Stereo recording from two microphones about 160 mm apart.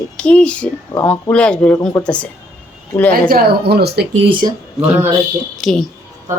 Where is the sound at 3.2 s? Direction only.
70° right (ahead or behind); by 4.1 s 90° right.